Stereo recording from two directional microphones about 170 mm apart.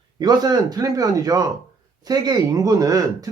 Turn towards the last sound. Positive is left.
turn(degrees=-20)  # may be behind; listen again after turning